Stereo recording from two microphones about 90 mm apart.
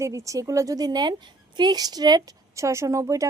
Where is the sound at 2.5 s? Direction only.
35° right (ahead or behind).